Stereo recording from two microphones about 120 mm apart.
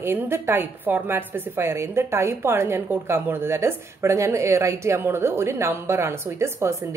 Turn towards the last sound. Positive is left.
turn(degrees=-25)  # may be behind; listen again after turning